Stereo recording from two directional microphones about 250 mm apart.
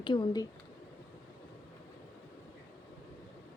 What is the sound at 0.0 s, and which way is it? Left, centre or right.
Speech, centre.